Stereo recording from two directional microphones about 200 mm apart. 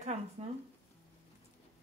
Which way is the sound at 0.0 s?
35° right (ahead or behind).